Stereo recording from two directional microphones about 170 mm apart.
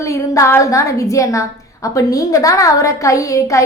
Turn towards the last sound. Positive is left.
turn(degrees=20)  # may be behind; listen again after turning